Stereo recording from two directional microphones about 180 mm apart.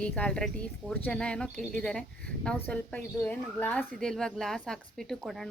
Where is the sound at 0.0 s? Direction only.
5° left (ahead or behind).